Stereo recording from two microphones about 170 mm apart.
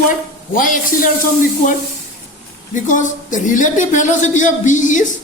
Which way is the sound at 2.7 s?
50° left (ahead or behind).